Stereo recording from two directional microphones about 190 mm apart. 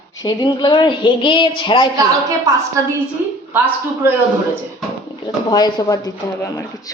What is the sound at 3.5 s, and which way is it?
Speech, 10° right (ahead or behind).